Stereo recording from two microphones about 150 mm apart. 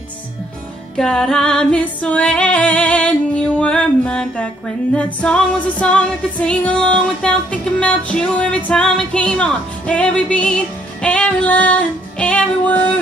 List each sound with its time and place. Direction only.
0.9 s music: 5° left (ahead or behind)